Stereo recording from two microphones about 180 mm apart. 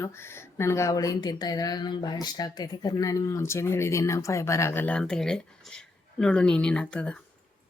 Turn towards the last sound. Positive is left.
turn(degrees=5)  # may be behind; listen again after turning